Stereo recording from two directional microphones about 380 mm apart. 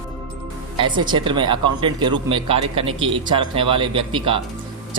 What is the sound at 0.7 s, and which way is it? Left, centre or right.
A man's voice, centre.